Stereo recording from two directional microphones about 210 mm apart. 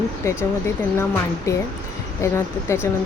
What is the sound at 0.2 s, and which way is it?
Speech, 15° left (ahead or behind).